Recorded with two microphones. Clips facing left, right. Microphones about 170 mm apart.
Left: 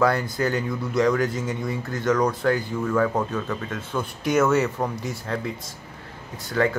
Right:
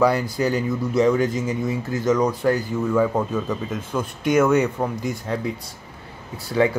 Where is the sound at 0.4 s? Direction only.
5° right (ahead or behind).